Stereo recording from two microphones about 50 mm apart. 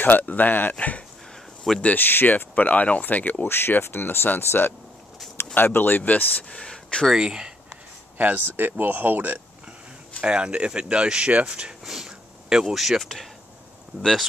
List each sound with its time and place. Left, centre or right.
0.0 s speech: left
2.0 s speech: left
3.4 s speech: left
5.5 s speech: left
6.5 s speech: centre
7.2 s speech: centre
8.2 s speech: right
10.2 s speech: right
11.8 s a sound: centre
12.7 s speech: centre